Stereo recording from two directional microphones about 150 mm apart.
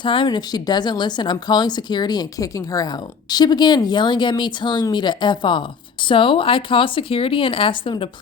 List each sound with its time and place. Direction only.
0.0 s a woman's voice: 35° left (ahead or behind)